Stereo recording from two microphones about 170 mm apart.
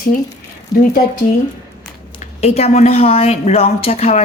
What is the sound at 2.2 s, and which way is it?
A woman's voice, 40° left (ahead or behind).